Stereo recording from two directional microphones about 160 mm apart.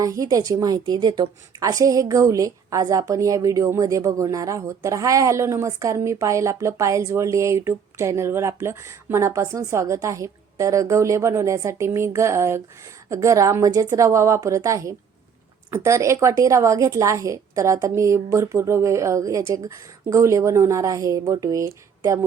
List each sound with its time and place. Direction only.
0.0 s a woman's voice: 20° right (ahead or behind)